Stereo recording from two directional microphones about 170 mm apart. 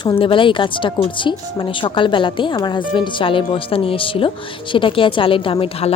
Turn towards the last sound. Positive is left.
turn(degrees=35)  # may be behind; listen again after turning